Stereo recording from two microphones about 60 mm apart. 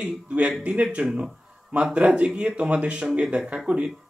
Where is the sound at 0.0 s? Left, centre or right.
Right.